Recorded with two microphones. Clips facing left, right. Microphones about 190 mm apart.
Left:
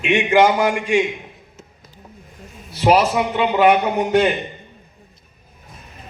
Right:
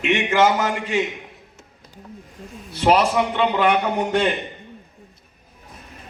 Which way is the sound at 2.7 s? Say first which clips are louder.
Left 2 dB; 10° left (ahead or behind).